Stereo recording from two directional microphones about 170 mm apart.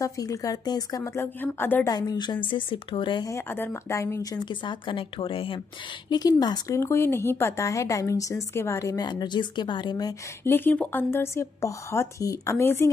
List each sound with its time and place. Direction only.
0.0 s a woman's voice: 20° left (ahead or behind)
2.0 s a woman's voice: 25° left (ahead or behind)
3.3 s a woman's voice: 10° left (ahead or behind)
10.5 s speech: 10° left (ahead or behind)